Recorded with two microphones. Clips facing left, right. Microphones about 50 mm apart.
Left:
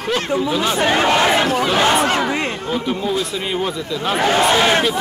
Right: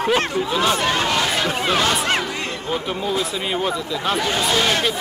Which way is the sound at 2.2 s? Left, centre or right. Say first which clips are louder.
Left 6 dB; left.